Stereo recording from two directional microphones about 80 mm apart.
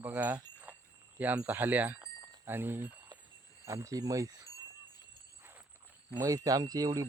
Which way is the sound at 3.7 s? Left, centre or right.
Right.